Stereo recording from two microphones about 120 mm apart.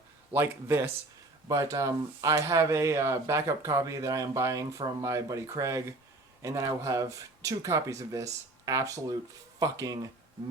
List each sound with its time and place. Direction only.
0.3 s speech: 20° right (ahead or behind)